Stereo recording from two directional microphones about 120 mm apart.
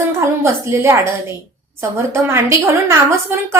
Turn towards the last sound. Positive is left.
turn(degrees=-20)  # may be behind; listen again after turning